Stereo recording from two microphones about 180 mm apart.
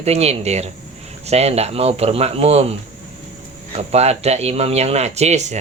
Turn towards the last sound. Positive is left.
turn(degrees=-40)  # may be behind; listen again after turning